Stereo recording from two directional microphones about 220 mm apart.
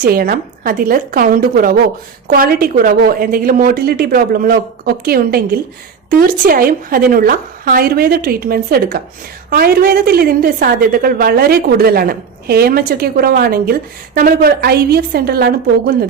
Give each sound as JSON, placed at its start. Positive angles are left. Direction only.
{"t": 0.0, "sound": "a woman's voice", "side_deg": -40}